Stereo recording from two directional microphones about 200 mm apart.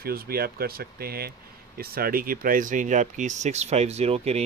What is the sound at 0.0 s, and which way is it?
Speech, 50° right (ahead or behind).